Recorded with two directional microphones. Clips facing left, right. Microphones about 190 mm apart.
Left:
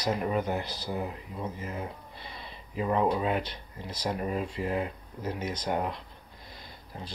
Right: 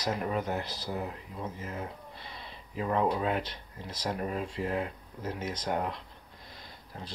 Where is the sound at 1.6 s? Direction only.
10° left (ahead or behind).